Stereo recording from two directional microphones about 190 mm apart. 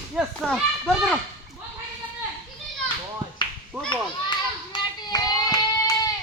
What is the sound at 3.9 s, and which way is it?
Children playing, 25° left (ahead or behind).